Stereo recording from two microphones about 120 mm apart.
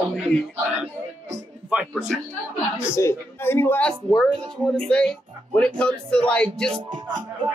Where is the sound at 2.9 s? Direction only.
20° left (ahead or behind).